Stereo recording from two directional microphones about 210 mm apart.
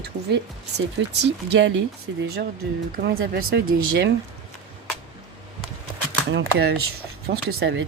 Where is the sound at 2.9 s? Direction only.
45° right (ahead or behind).